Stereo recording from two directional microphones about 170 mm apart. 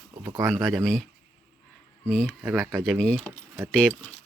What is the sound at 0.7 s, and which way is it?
Speech, 5° left (ahead or behind).